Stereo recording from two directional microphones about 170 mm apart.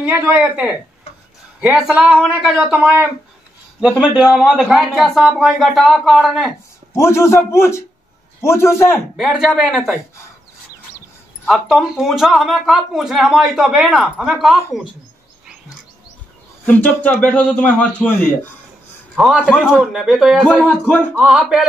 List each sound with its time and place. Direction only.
0.0 s speech: 10° right (ahead or behind)
6.9 s a man's voice: 15° left (ahead or behind)
9.1 s speech: centre (ahead or behind)
11.4 s speech: centre (ahead or behind)
16.6 s a man's voice: 10° left (ahead or behind)